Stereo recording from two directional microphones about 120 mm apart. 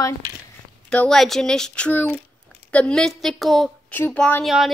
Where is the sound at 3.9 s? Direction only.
15° left (ahead or behind).